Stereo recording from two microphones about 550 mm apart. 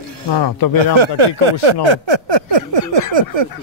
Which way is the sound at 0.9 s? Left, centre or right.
Right.